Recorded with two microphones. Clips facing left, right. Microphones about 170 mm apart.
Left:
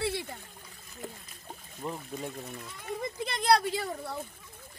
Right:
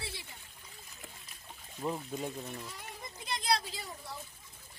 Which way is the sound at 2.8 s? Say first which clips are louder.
Left 12 dB; 65° left (ahead or behind).